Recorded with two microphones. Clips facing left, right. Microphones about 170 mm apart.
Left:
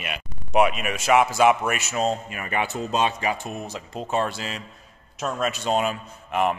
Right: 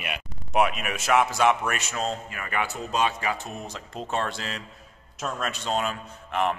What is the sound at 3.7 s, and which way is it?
A man's voice, 5° left (ahead or behind).